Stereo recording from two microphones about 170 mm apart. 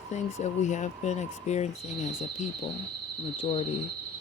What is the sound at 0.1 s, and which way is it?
Speech, 45° left (ahead or behind).